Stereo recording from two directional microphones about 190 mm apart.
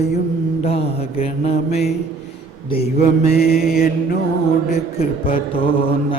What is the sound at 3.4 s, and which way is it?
Mantra, 55° left (ahead or behind).